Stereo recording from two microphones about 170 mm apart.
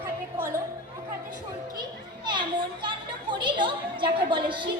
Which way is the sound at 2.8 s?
25° right (ahead or behind).